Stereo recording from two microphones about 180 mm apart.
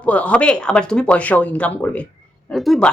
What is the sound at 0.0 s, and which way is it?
A woman's voice, 5° left (ahead or behind).